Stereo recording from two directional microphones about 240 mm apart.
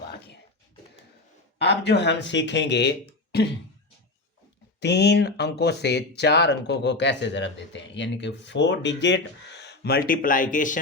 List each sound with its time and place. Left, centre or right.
1.5 s speech: left
4.8 s speech: left